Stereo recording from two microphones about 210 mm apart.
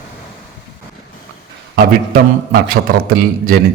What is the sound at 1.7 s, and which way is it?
A man's voice, 45° right (ahead or behind).